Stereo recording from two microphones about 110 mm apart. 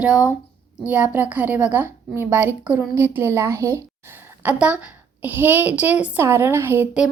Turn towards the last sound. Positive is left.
turn(degrees=-20)  # may be behind; listen again after turning